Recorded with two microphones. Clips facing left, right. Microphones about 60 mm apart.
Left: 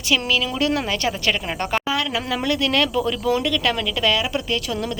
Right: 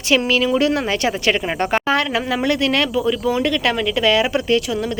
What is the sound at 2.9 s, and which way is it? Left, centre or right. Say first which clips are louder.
Speech: right 2 dB; centre.